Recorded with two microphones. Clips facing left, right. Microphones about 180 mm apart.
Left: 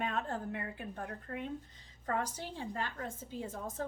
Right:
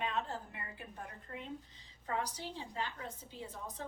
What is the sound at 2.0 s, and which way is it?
A woman's voice, 50° left (ahead or behind).